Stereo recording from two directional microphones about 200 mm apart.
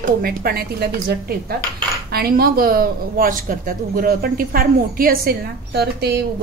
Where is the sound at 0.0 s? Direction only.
50° right (ahead or behind).